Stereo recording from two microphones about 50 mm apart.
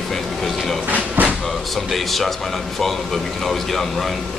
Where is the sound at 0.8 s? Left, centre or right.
Right.